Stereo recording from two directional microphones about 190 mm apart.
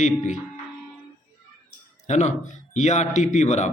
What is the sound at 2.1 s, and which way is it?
Speech, 40° left (ahead or behind).